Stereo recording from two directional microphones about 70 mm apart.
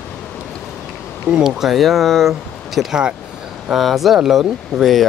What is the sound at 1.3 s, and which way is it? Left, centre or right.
Speech, centre.